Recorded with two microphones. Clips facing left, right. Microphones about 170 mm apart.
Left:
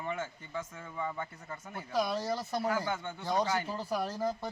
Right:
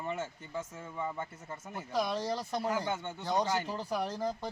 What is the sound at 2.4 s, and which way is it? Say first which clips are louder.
Speech: left 1 dB; 15° right (ahead or behind).